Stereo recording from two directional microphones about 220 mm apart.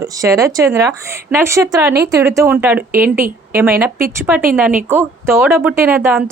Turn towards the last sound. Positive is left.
turn(degrees=-10)  # may be behind; listen again after turning